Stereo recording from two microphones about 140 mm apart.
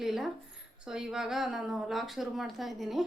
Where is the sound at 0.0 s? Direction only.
5° right (ahead or behind).